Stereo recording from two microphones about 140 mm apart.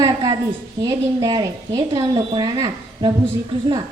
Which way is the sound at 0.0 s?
30° right (ahead or behind).